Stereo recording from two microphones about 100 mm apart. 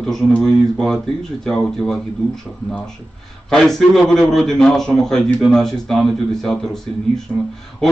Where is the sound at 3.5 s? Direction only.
5° left (ahead or behind).